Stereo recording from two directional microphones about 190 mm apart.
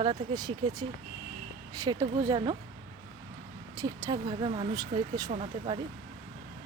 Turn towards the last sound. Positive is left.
turn(degrees=-30)  # may be behind; listen again after turning